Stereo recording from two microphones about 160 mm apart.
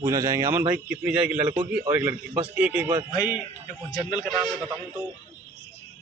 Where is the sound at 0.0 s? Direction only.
15° right (ahead or behind).